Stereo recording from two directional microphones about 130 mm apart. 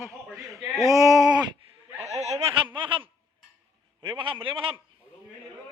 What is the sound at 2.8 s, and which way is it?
A man's voice, 40° right (ahead or behind).